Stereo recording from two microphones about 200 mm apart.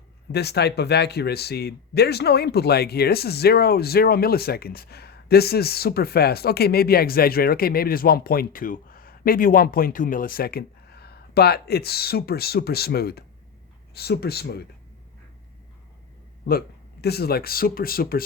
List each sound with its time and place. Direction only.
0.3 s speech: 55° left (ahead or behind)
16.5 s speech: 50° left (ahead or behind)